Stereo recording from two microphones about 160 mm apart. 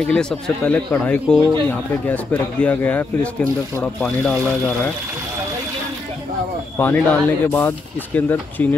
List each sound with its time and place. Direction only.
0.0 s speech: 5° left (ahead or behind)
6.8 s speech: 10° left (ahead or behind)